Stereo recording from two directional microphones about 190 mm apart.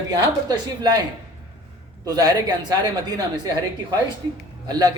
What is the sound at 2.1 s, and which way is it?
Speech, 20° right (ahead or behind).